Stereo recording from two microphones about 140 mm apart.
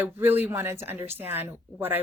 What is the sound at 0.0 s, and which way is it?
Speech, 15° right (ahead or behind).